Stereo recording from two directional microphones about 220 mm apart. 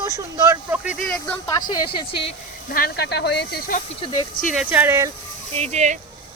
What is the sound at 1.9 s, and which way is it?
Speech, 25° left (ahead or behind).